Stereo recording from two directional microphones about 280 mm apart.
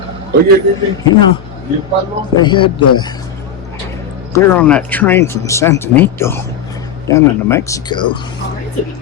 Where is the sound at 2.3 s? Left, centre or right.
Centre.